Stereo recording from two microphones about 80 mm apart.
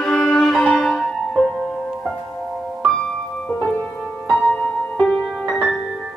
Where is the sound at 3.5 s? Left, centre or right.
Centre.